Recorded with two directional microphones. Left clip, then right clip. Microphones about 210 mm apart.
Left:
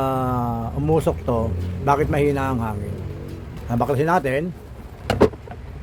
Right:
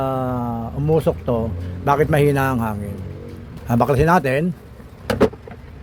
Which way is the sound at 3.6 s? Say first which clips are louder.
Right 4 dB; 30° right (ahead or behind).